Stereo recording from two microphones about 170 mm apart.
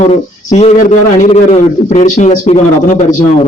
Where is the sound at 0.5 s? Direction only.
40° left (ahead or behind).